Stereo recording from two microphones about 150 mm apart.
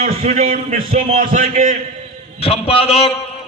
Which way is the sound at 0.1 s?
45° right (ahead or behind).